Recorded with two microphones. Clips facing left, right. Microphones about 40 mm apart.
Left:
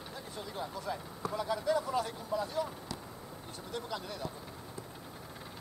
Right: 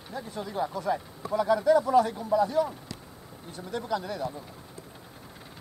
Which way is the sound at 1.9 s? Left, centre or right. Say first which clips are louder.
Right 11 dB; right.